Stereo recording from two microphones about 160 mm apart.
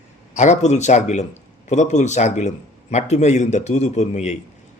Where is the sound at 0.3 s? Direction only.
45° left (ahead or behind).